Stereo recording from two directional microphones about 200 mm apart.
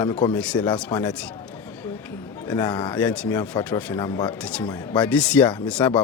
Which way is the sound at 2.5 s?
10° left (ahead or behind).